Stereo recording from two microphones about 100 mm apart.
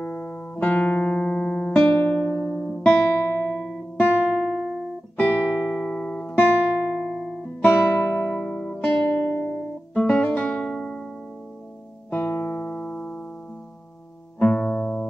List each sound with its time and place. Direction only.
0.0 s music: 15° left (ahead or behind)
3.1 s music: 20° left (ahead or behind)
4.1 s music: 15° right (ahead or behind)
4.4 s music: centre (ahead or behind)
5.1 s music: 15° left (ahead or behind)
6.6 s music: 10° right (ahead or behind)
7.6 s music: 20° left (ahead or behind)
8.5 s music: 10° left (ahead or behind)
9.9 s music: 10° left (ahead or behind)
12.1 s music: 20° left (ahead or behind)
14.4 s music: 10° left (ahead or behind)